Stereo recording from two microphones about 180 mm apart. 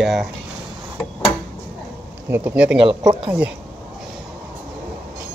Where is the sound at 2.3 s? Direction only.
10° right (ahead or behind).